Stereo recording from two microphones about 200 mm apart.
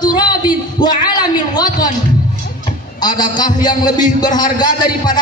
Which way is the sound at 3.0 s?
20° left (ahead or behind).